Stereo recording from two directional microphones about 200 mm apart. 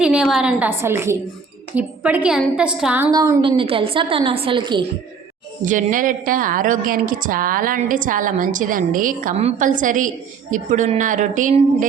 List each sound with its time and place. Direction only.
0.0 s a woman's voice: 5° right (ahead or behind)
3.1 s a woman's voice: 15° right (ahead or behind)
5.6 s a woman's voice: 40° right (ahead or behind)